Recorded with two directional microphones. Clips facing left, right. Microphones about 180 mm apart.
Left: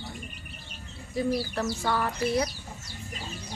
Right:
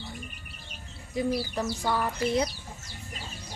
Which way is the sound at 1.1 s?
15° right (ahead or behind).